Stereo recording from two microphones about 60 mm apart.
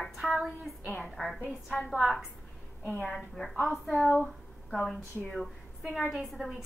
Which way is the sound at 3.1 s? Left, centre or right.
Centre.